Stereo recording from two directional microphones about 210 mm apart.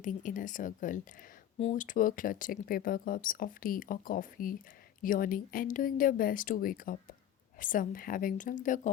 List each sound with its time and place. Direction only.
0.0 s speech: 40° left (ahead or behind)